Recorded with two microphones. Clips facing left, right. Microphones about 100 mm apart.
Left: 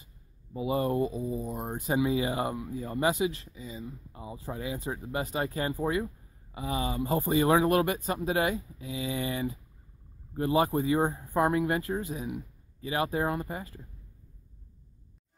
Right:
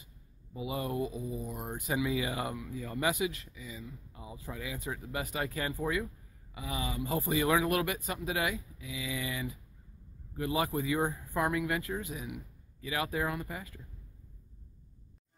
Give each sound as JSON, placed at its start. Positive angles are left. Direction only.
{"t": 0.6, "sound": "speech", "side_deg": 35}
{"t": 1.3, "sound": "speech", "side_deg": 25}